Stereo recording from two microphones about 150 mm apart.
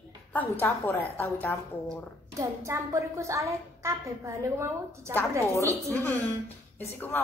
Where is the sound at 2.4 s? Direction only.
20° right (ahead or behind).